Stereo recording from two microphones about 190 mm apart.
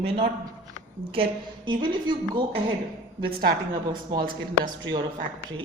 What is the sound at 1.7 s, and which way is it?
Speech, 25° right (ahead or behind).